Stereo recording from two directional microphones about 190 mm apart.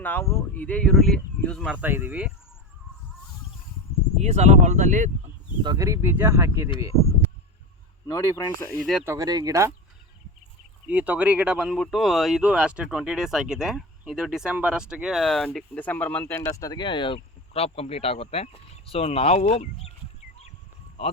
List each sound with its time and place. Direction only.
0.0 s speech: 10° left (ahead or behind); by 2.3 s 10° right (ahead or behind)
4.2 s speech: 35° right (ahead or behind)
5.6 s speech: 20° right (ahead or behind)
8.0 s speech: 15° left (ahead or behind)
9.0 s speech: 20° right (ahead or behind)
10.8 s speech: 10° right (ahead or behind); by 19.9 s 35° left (ahead or behind)